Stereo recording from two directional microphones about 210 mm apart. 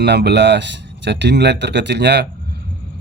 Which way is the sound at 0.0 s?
55° right (ahead or behind).